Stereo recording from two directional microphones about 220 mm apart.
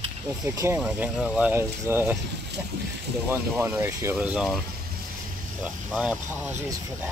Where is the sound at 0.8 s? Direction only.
5° right (ahead or behind).